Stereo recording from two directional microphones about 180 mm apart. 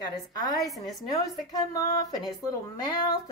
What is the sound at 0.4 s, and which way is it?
Speech, 20° left (ahead or behind).